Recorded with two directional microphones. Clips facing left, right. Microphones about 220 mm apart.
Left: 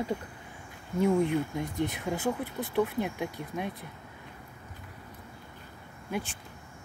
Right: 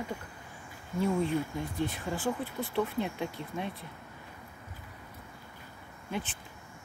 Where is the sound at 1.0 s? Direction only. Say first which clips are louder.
Left 4 dB; 15° left (ahead or behind).